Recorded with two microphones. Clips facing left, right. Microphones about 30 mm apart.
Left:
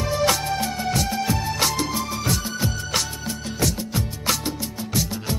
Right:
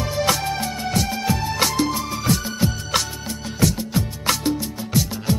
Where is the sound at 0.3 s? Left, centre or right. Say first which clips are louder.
Right 1 dB; centre.